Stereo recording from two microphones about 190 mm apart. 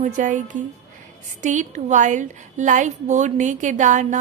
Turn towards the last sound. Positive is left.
turn(degrees=-40)  # may be behind; listen again after turning